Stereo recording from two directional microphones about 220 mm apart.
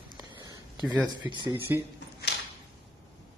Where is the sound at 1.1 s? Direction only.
20° right (ahead or behind).